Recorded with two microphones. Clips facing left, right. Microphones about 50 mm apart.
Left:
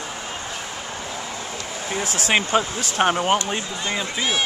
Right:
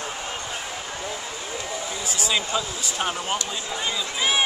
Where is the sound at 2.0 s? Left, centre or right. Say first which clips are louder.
Left 6 dB; left.